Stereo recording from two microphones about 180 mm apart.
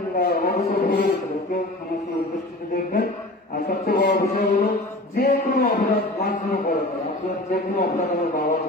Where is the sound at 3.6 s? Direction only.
55° left (ahead or behind).